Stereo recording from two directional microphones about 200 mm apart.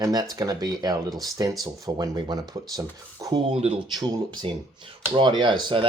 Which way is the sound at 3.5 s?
30° right (ahead or behind).